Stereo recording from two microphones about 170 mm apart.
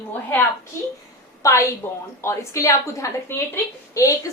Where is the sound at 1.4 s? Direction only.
15° left (ahead or behind).